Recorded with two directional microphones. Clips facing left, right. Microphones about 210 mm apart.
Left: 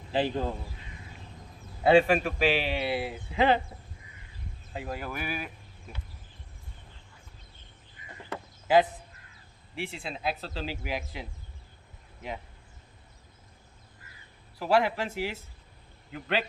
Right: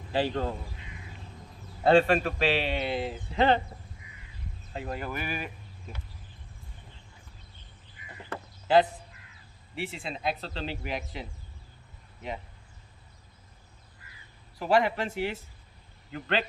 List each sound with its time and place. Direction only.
0.1 s a man's voice: 20° left (ahead or behind)
1.8 s a man's voice: 10° left (ahead or behind)
4.7 s speech: 5° left (ahead or behind)
8.3 s a sound: 10° left (ahead or behind)
9.7 s speech: centre (ahead or behind)
14.6 s a man's voice: 5° left (ahead or behind)